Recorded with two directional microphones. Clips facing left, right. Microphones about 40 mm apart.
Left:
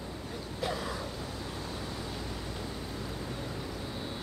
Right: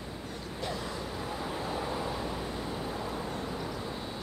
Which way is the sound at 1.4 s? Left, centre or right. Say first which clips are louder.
Right 5 dB; right.